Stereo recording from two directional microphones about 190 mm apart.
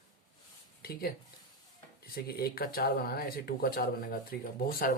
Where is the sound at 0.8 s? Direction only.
55° left (ahead or behind).